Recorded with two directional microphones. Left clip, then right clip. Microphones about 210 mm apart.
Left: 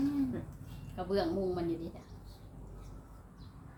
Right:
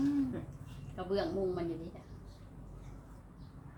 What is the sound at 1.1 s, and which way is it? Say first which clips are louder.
Speech: left 1 dB; 25° left (ahead or behind).